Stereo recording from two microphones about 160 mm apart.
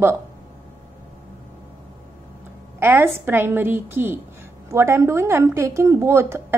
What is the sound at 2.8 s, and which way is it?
Speech, 15° right (ahead or behind).